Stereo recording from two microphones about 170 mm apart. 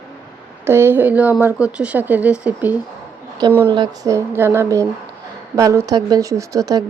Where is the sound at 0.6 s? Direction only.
15° right (ahead or behind).